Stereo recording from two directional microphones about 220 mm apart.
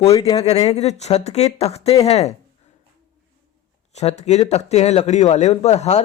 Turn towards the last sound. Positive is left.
turn(degrees=30)  # may be behind; listen again after turning